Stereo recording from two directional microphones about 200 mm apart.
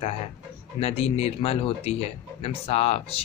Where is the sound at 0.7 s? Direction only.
30° left (ahead or behind).